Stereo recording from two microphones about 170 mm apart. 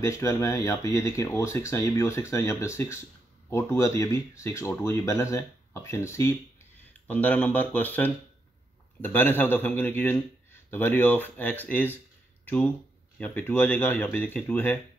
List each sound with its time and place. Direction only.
0.0 s a man's voice: 15° left (ahead or behind)
13.2 s a man's voice: 10° left (ahead or behind)